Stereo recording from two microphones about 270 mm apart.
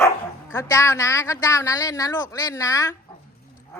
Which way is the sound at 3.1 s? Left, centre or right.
Centre.